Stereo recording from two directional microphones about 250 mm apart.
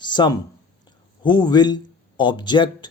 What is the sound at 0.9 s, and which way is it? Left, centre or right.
A man's voice, centre.